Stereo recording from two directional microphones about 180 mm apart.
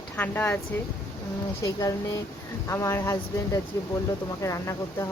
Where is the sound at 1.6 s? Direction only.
20° left (ahead or behind).